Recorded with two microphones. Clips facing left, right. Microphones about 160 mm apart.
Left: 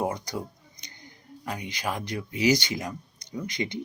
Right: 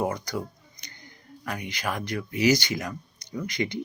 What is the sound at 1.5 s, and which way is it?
Speech, 20° left (ahead or behind).